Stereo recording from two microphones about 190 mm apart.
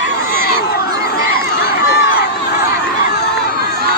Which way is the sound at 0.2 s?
90° right.